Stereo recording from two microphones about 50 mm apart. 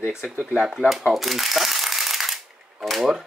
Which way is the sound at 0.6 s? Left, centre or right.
Centre.